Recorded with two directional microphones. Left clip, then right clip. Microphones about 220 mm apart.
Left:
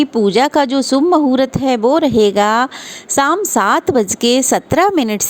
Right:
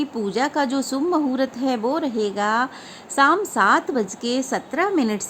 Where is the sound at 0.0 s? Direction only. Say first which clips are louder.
Left 10 dB; 30° left (ahead or behind).